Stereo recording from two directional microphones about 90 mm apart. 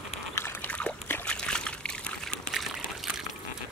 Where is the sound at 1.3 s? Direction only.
10° left (ahead or behind).